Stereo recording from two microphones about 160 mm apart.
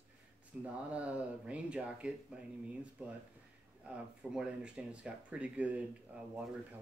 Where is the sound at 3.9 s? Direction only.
5° right (ahead or behind).